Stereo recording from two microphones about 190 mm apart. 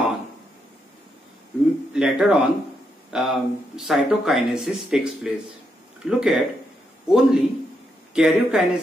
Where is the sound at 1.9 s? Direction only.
5° right (ahead or behind).